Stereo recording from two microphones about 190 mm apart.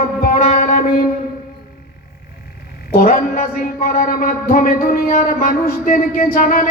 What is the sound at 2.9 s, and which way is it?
Speech, 45° left (ahead or behind).